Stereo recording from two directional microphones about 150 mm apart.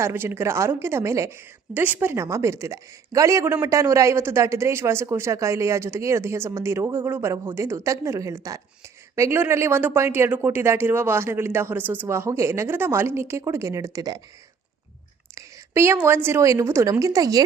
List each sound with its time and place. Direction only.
0.0 s a woman's voice: 15° right (ahead or behind)
15.4 s a woman's voice: 15° right (ahead or behind)